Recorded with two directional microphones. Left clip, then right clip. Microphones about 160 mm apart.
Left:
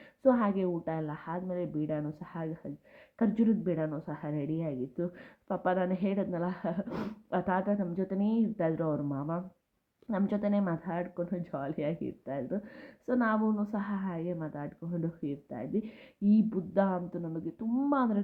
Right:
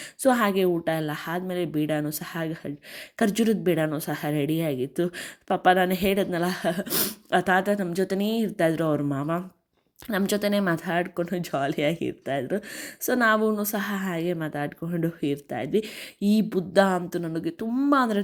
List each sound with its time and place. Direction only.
0.2 s speech: 20° right (ahead or behind)
3.6 s speech: 30° right (ahead or behind)
6.8 s a woman's voice: 5° right (ahead or behind)
7.3 s speech: 20° right (ahead or behind)
10.1 s a woman's voice: 15° right (ahead or behind)
10.5 s speech: 30° right (ahead or behind)